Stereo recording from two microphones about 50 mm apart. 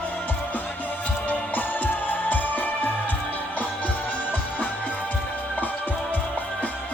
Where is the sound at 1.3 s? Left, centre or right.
Left.